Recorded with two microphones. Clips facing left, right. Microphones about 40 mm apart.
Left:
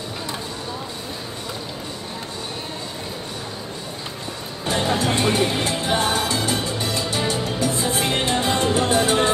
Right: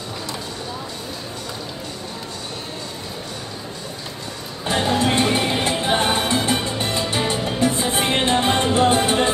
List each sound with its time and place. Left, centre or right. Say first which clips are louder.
4.6 s music: right 2 dB; right